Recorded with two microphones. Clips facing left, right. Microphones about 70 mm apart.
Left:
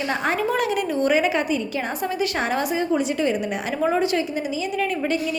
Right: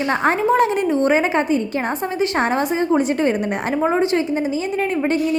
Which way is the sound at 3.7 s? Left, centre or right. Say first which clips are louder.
Right 3 dB; right.